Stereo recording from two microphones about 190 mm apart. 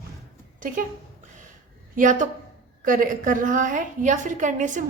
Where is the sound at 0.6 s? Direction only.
45° right (ahead or behind).